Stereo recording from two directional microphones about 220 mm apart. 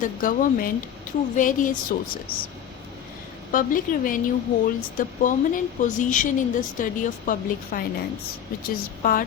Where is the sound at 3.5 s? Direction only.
40° left (ahead or behind).